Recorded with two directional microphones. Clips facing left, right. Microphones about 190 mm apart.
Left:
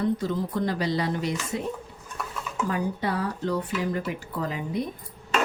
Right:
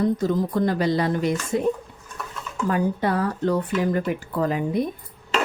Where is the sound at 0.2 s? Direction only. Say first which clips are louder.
Right 5 dB; 50° right (ahead or behind).